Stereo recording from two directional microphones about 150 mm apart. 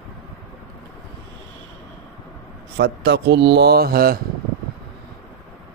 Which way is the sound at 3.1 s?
90° right.